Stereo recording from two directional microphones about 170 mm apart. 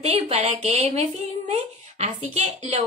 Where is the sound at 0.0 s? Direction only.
40° right (ahead or behind).